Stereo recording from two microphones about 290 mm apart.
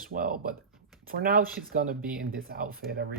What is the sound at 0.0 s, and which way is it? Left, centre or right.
Speech, right.